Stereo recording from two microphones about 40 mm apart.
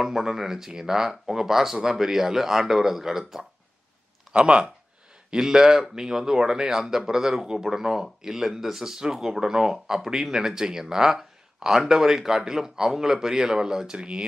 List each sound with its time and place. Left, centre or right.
0.0 s speech: centre
4.3 s speech: right
5.3 s speech: centre